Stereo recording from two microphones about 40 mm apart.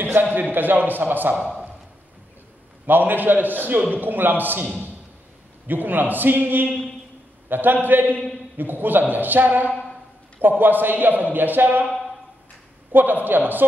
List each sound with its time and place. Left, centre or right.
0.0 s a man's voice: right
2.9 s a man's voice: right
5.7 s a man's voice: right
12.9 s a man's voice: right